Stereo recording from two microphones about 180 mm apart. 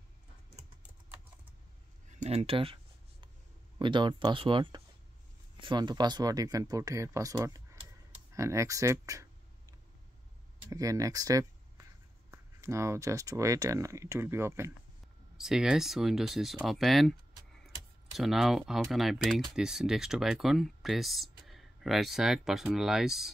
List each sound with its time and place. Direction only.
2.0 s speech: 35° right (ahead or behind); by 9.3 s 15° right (ahead or behind)
10.7 s speech: 20° right (ahead or behind)
15.3 s speech: 5° right (ahead or behind)